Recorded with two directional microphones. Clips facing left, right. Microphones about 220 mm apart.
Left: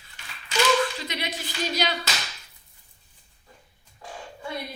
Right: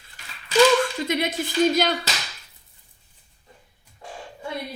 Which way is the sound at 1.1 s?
50° right (ahead or behind).